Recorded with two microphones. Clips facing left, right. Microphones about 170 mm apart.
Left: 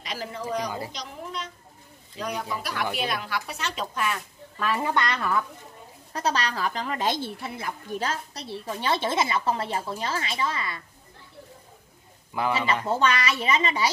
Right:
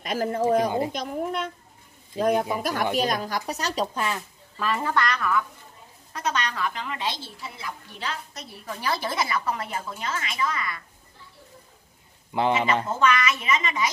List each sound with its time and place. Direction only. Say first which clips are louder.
0.0 s speech: right 9 dB; 50° right (ahead or behind)
0.7 s a woman's voice: right 8 dB; 25° right (ahead or behind)
0.9 s speech: right 8 dB; 50° right (ahead or behind); by 4.2 s 25° right (ahead or behind)
4.6 s speech: even; centre (ahead or behind)
4.8 s a woman's voice: right 1 dB; 20° left (ahead or behind); by 8.5 s 40° left (ahead or behind)
8.5 s speech: left 2 dB; 25° left (ahead or behind)
12.8 s a woman's voice: right 1 dB; 30° left (ahead or behind)